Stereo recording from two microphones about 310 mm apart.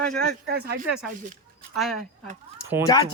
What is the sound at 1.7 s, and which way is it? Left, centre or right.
Speech, centre.